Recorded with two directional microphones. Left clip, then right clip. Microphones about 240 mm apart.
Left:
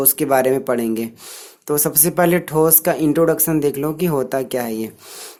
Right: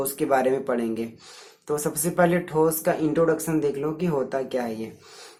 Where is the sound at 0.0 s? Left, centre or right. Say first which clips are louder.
Left 6 dB; left.